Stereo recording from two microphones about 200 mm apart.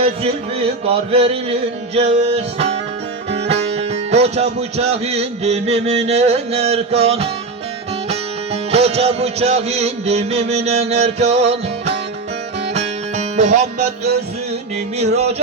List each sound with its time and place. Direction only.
0.9 s mantra: 30° right (ahead or behind)
2.0 s music: 30° right (ahead or behind)
8.7 s music: 30° right (ahead or behind)
12.7 s music: 35° right (ahead or behind)
14.9 s music: 30° right (ahead or behind)